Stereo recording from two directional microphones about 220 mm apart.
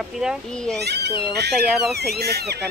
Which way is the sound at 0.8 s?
50° right (ahead or behind).